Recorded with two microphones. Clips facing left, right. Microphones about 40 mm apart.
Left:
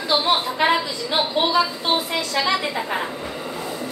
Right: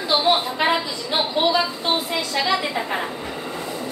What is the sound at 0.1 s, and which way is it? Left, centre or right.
Speech, centre.